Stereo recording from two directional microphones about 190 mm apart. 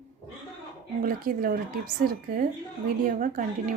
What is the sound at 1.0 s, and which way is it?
Speech, 50° right (ahead or behind).